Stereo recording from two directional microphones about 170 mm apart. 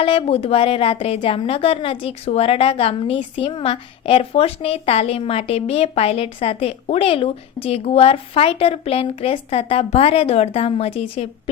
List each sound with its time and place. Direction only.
0.0 s a woman's voice: 35° left (ahead or behind)